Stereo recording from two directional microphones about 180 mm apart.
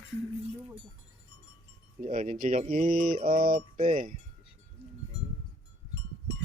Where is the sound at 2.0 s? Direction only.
45° right (ahead or behind).